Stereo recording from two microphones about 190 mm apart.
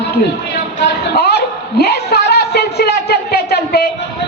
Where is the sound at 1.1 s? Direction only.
55° left (ahead or behind).